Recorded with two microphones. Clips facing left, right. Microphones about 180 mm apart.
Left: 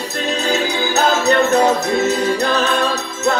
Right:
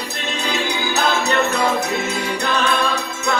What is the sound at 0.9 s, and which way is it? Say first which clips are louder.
Music: left 5 dB; 40° left (ahead or behind).